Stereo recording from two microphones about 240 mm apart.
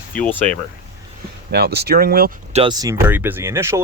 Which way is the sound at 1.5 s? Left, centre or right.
Right.